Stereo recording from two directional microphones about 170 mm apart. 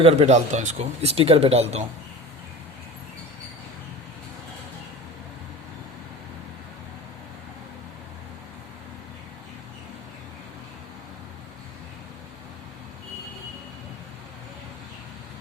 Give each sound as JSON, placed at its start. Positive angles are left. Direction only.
{"t": 0.0, "sound": "speech", "side_deg": -40}